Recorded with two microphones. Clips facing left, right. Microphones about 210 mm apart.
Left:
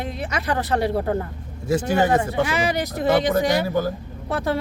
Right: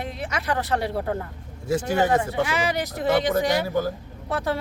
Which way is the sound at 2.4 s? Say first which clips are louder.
Left 2 dB; 40° left (ahead or behind).